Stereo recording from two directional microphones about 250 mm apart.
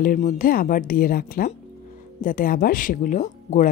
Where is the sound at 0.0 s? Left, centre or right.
Left.